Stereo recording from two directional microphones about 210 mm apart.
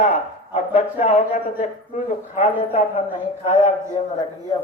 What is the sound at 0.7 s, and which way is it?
Speech, 35° left (ahead or behind).